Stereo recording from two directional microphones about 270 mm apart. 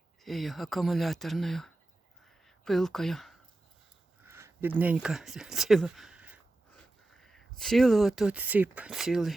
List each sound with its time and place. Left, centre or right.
0.2 s speech: centre
2.2 s a sound: centre
4.3 s speech: centre